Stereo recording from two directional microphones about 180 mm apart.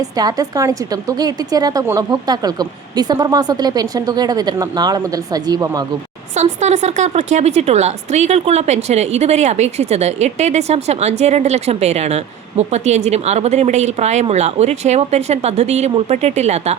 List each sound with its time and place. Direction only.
0.2 s a woman's voice: 20° right (ahead or behind)
6.3 s speech: 40° right (ahead or behind)